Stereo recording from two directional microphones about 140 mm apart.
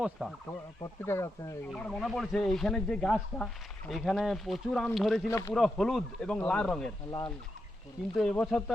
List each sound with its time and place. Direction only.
0.0 s speech: centre (ahead or behind)
0.8 s speech: 20° left (ahead or behind)
1.7 s speech: 5° left (ahead or behind)
5.3 s speech: 20° left (ahead or behind)
5.5 s speech: centre (ahead or behind)
8.1 s speech: 5° left (ahead or behind)